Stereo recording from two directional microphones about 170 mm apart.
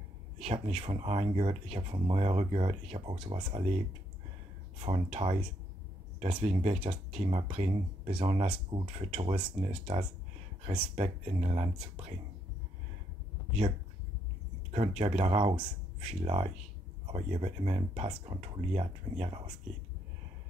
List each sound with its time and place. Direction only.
0.4 s speech: 40° right (ahead or behind)
3.4 s speech: 40° right (ahead or behind)
11.0 s speech: 40° right (ahead or behind)
14.7 s speech: 40° right (ahead or behind)